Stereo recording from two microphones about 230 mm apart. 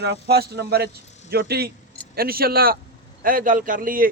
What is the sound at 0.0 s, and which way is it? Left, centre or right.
A man's voice, right.